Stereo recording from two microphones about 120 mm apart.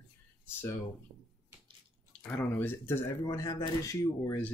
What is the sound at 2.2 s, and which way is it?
Speech, 15° left (ahead or behind).